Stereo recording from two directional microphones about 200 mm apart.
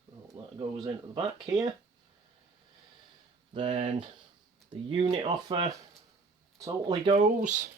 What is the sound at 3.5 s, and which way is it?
Speech, 30° right (ahead or behind).